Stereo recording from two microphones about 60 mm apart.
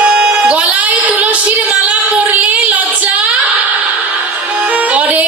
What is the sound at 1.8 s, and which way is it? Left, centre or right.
Singing, right.